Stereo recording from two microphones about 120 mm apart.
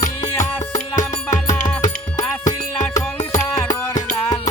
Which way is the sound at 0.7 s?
90° left.